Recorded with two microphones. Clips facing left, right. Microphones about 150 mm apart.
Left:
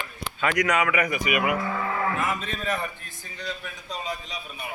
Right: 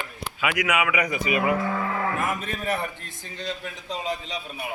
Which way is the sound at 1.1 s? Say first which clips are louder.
Right 1 dB; 30° right (ahead or behind).